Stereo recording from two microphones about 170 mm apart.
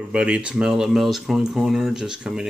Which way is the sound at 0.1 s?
5° right (ahead or behind).